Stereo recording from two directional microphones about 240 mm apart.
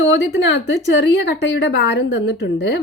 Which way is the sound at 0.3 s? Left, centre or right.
Left.